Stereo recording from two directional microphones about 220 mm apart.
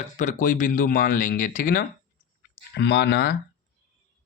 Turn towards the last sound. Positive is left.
turn(degrees=45)  # may be behind; listen again after turning